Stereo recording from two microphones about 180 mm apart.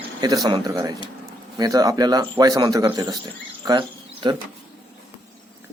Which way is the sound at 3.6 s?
25° right (ahead or behind).